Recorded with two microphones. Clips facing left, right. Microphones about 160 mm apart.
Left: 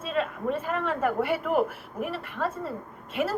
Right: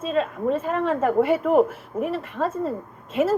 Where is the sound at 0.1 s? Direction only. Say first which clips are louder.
Right 5 dB; 30° right (ahead or behind).